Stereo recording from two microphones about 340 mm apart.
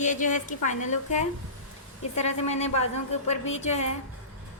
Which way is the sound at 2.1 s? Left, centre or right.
Centre.